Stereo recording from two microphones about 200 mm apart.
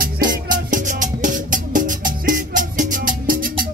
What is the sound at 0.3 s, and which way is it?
Music, 40° right (ahead or behind).